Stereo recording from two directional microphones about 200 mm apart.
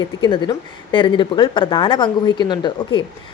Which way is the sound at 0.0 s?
25° left (ahead or behind).